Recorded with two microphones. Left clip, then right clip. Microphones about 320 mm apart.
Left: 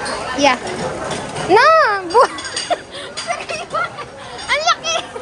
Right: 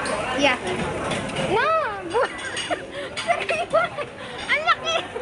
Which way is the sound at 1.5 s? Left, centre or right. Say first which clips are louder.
Left 12 dB; centre.